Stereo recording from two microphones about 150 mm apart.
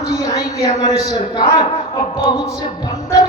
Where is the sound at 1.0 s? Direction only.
30° left (ahead or behind).